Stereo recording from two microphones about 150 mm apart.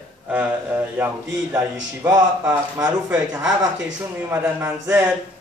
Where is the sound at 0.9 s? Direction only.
15° right (ahead or behind).